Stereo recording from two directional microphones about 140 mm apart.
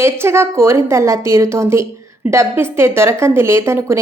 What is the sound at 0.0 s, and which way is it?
A woman's voice, 20° right (ahead or behind).